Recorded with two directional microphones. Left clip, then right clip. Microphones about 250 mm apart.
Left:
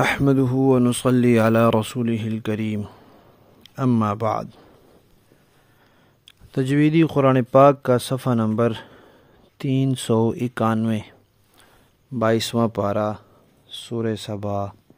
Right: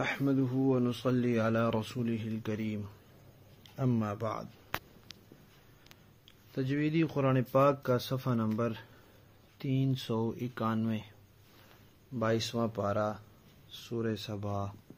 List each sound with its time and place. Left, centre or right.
0.0 s speech: left
6.2 s speech: left
12.2 s speech: left